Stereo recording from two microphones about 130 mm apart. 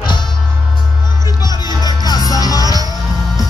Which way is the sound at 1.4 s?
30° left (ahead or behind).